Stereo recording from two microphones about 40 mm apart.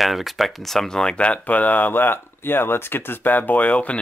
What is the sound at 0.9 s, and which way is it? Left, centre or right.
Speech, centre.